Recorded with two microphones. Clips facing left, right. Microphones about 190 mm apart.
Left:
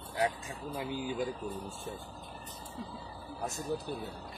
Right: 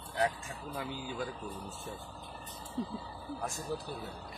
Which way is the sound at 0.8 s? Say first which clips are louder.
Left 4 dB; 15° left (ahead or behind).